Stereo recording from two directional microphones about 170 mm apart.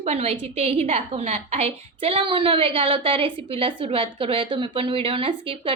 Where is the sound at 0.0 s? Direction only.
40° right (ahead or behind).